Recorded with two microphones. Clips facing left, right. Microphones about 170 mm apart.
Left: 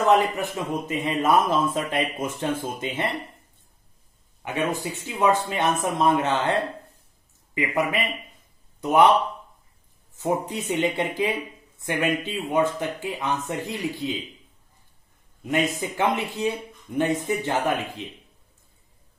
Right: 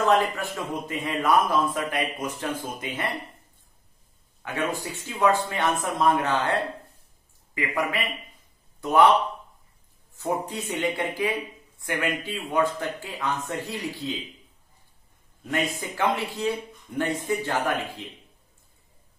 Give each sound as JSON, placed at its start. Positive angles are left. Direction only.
{"t": 0.0, "sound": "a man's voice", "side_deg": 20}
{"t": 4.4, "sound": "a man's voice", "side_deg": 20}
{"t": 7.5, "sound": "a man's voice", "side_deg": 20}
{"t": 10.1, "sound": "a man's voice", "side_deg": 20}
{"t": 15.4, "sound": "a man's voice", "side_deg": 20}